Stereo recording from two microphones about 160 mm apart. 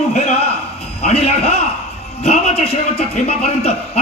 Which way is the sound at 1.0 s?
40° left (ahead or behind).